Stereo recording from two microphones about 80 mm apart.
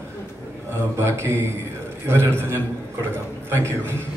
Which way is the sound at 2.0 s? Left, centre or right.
Right.